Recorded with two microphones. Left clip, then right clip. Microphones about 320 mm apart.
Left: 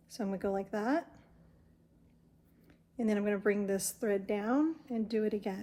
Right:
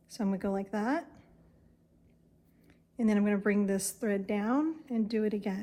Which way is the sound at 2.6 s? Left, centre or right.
Centre.